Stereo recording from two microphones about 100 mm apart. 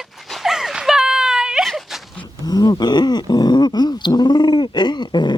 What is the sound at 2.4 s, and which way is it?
Speech, 40° left (ahead or behind).